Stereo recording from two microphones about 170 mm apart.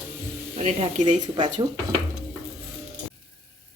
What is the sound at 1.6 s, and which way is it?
Speech, 25° right (ahead or behind).